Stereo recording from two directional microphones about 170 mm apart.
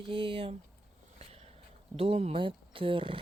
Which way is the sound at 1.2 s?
35° right (ahead or behind).